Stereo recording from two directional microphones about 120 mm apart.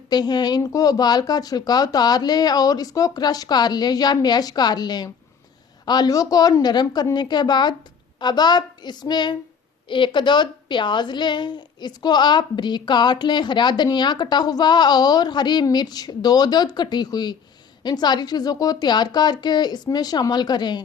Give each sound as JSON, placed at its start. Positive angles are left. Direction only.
{"t": 0.1, "sound": "a woman's voice", "side_deg": 35}